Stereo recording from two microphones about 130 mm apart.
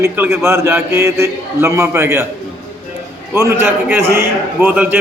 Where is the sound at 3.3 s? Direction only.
20° right (ahead or behind).